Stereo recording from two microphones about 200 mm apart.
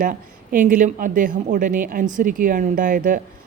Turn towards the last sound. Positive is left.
turn(degrees=-45)  # may be behind; listen again after turning